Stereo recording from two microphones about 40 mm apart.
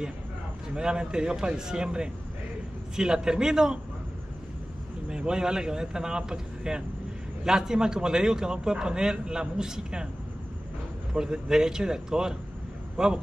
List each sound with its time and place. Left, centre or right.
0.7 s a man's voice: centre
5.1 s a man's voice: centre
11.1 s a man's voice: centre